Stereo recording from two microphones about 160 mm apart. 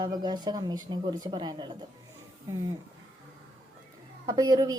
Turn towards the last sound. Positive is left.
turn(degrees=-25)  # may be behind; listen again after turning